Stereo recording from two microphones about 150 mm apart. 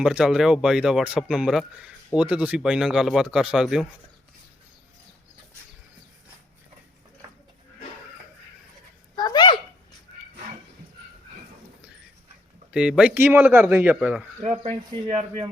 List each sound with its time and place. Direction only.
0.0 s a man's voice: 5° right (ahead or behind)
9.1 s a sound: 30° left (ahead or behind)
12.7 s a man's voice: 5° right (ahead or behind)
14.5 s speech: 55° right (ahead or behind)